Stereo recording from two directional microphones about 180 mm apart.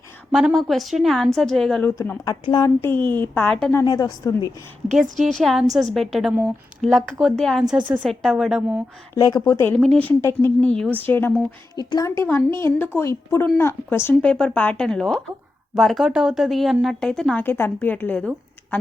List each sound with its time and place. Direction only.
0.3 s a woman's voice: 5° right (ahead or behind)
2.0 s a woman's voice: 20° left (ahead or behind)
3.8 s a woman's voice: 20° left (ahead or behind)
5.2 s a woman's voice: centre (ahead or behind)
9.1 s speech: 20° left (ahead or behind)
9.7 s speech: 5° left (ahead or behind)
11.8 s a woman's voice: 20° left (ahead or behind)